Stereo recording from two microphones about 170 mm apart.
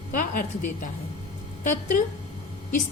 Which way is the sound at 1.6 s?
50° left (ahead or behind).